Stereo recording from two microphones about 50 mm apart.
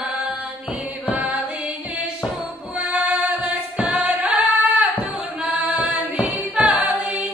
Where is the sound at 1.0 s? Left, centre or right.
Right.